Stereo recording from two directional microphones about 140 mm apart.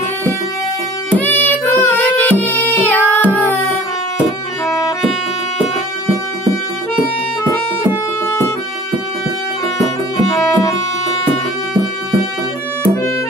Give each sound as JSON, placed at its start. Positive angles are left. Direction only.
{"t": 1.1, "sound": "music", "side_deg": 15}
{"t": 10.3, "sound": "music", "side_deg": 25}